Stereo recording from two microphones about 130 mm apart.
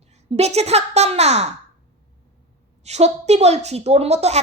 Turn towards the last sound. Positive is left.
turn(degrees=-55)  # may be behind; listen again after turning